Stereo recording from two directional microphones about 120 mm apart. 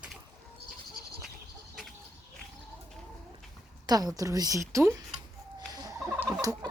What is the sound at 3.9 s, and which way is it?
A woman's voice, 30° right (ahead or behind).